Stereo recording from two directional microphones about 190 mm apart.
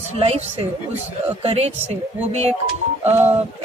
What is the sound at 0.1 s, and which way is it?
A woman's voice, 35° right (ahead or behind).